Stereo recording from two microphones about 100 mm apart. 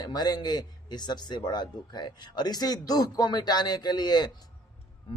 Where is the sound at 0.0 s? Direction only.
40° left (ahead or behind).